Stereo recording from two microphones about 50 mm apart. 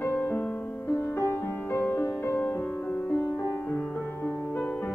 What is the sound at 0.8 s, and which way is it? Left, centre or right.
Music, left.